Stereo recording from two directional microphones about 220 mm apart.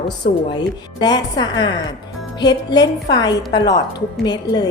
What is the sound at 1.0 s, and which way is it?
A woman's voice, 20° left (ahead or behind).